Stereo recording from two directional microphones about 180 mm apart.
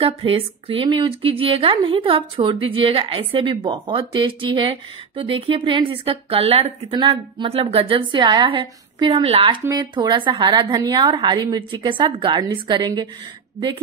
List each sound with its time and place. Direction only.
0.0 s speech: 30° right (ahead or behind)